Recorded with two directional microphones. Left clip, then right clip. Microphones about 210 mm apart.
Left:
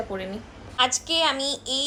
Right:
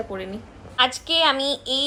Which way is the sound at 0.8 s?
5° left (ahead or behind).